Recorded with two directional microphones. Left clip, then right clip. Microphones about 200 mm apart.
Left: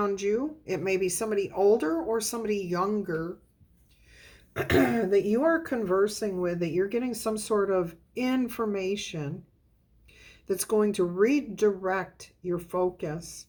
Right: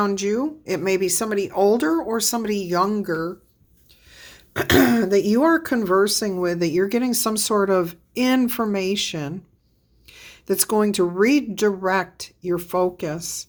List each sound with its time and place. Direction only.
0.0 s speech: 45° right (ahead or behind)